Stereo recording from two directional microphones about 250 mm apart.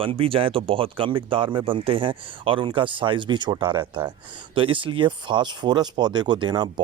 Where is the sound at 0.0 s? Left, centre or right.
Right.